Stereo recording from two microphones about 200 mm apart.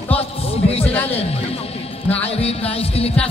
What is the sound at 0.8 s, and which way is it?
Speech, 10° left (ahead or behind).